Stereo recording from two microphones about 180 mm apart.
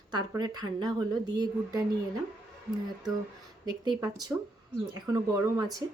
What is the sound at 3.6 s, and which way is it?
A woman's voice, 20° right (ahead or behind).